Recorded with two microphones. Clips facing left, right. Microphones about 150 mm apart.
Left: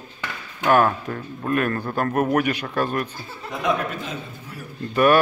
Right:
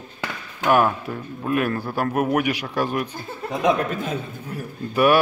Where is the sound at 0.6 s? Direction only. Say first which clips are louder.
Even; 10° right (ahead or behind).